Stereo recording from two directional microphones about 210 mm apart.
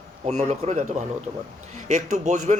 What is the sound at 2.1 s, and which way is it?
Speech, 35° right (ahead or behind).